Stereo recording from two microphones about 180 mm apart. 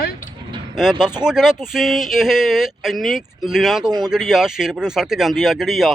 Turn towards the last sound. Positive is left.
turn(degrees=0)  # may be behind; listen again after turning